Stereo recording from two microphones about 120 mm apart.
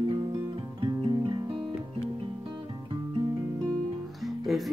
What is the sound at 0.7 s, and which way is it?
Music, 45° right (ahead or behind).